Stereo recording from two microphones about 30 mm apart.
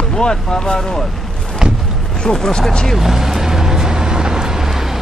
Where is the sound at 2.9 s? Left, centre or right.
Centre.